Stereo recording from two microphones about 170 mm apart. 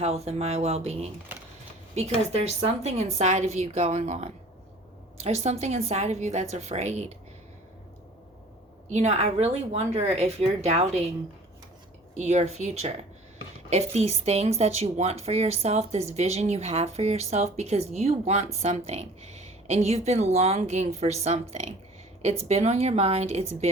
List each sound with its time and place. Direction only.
0.0 s speech: 40° right (ahead or behind)
8.9 s speech: 40° right (ahead or behind)
12.1 s speech: 40° right (ahead or behind)